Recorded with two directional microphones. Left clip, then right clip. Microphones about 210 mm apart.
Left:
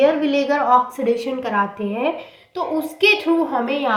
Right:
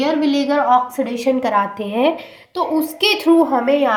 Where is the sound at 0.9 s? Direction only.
45° right (ahead or behind).